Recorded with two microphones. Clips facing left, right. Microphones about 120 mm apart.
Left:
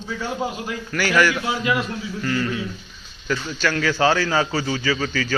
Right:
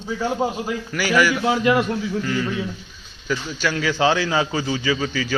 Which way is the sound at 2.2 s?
5° right (ahead or behind).